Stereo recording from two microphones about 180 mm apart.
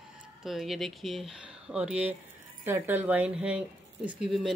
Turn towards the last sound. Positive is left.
turn(degrees=0)  # may be behind; listen again after turning